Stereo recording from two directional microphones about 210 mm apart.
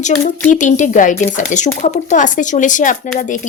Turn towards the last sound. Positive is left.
turn(degrees=35)  # may be behind; listen again after turning